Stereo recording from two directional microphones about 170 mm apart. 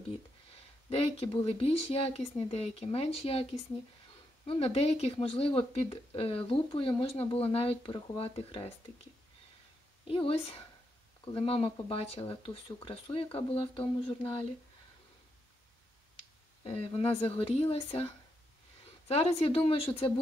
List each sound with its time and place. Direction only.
0.8 s speech: 35° left (ahead or behind)
4.5 s speech: 35° left (ahead or behind)
10.0 s speech: 35° left (ahead or behind)
16.6 s speech: 35° left (ahead or behind)